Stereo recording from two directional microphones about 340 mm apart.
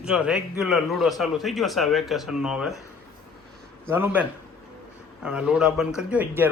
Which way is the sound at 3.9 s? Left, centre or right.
Centre.